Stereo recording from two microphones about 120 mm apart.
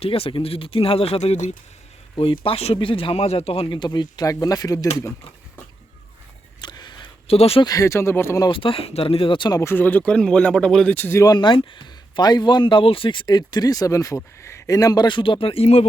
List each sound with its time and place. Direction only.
0.0 s speech: 50° left (ahead or behind)
2.1 s speech: 50° left (ahead or behind)
3.8 s speech: 40° left (ahead or behind)
6.6 s a sound: 40° left (ahead or behind)
7.3 s speech: 55° left (ahead or behind)
7.6 s speech: 30° left (ahead or behind)
8.4 s speech: 45° left (ahead or behind)
9.6 s speech: 20° left (ahead or behind)
11.2 s speech: 35° left (ahead or behind); by 15.9 s 60° left (ahead or behind)